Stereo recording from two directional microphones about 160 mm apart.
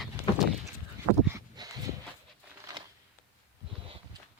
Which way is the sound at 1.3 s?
25° right (ahead or behind).